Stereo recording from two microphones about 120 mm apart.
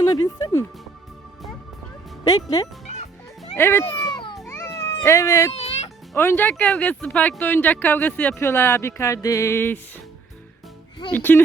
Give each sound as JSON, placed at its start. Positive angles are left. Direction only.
{"t": 0.2, "sound": "speech", "side_deg": 25}
{"t": 3.6, "sound": "speech", "side_deg": 20}
{"t": 3.9, "sound": "a sound", "side_deg": 35}
{"t": 4.4, "sound": "cat", "side_deg": 25}
{"t": 5.5, "sound": "music", "side_deg": 60}
{"t": 6.1, "sound": "speech", "side_deg": 15}
{"t": 11.1, "sound": "speech", "side_deg": 20}